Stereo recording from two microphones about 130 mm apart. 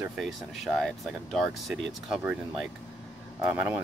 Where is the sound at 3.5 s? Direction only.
15° right (ahead or behind).